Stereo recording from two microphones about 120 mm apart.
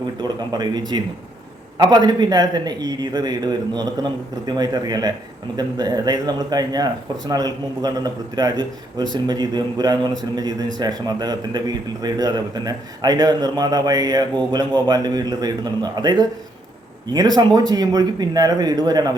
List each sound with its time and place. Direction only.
0.2 s a man's voice: 35° right (ahead or behind)